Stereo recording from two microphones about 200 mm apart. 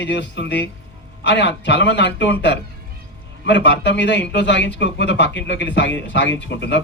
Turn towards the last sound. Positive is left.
turn(degrees=60)  # may be behind; listen again after turning